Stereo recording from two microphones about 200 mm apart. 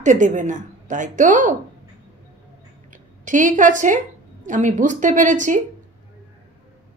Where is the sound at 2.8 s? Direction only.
40° right (ahead or behind).